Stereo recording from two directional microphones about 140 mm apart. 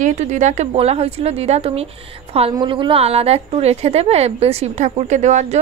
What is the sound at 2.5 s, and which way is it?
A woman's voice, 35° right (ahead or behind).